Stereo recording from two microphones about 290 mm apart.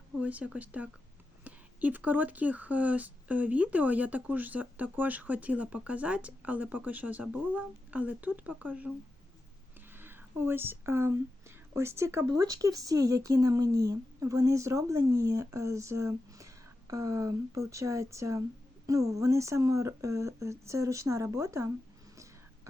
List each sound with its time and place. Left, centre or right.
0.2 s speech: centre
9.9 s speech: centre
22.1 s whispering: centre